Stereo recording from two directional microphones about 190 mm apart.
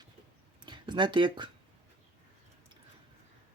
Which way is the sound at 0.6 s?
25° right (ahead or behind).